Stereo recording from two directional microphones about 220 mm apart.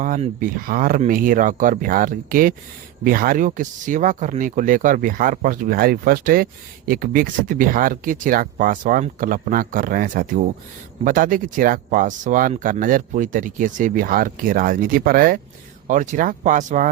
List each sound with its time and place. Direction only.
0.0 s speech: 35° right (ahead or behind)